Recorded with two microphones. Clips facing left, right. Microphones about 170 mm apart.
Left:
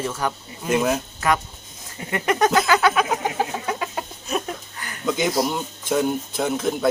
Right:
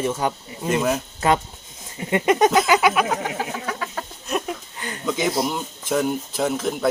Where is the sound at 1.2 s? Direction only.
25° right (ahead or behind).